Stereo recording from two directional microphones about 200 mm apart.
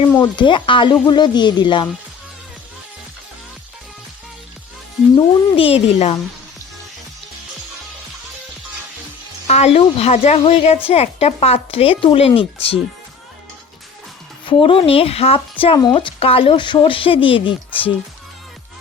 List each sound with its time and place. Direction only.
0.2 s speech: 25° left (ahead or behind)
5.1 s speech: 30° left (ahead or behind)
9.5 s speech: 30° left (ahead or behind)
14.4 s speech: 25° left (ahead or behind)